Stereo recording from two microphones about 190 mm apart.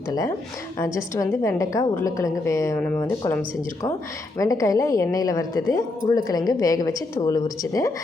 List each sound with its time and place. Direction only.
0.1 s a woman's voice: 20° left (ahead or behind)